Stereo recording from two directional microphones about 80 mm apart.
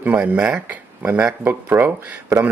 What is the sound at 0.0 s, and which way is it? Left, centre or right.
Speech, centre.